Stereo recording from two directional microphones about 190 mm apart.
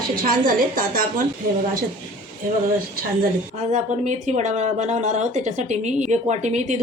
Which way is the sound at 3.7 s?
40° right (ahead or behind).